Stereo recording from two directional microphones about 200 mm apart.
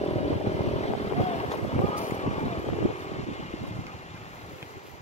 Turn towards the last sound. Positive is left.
turn(degrees=35)  # may be behind; listen again after turning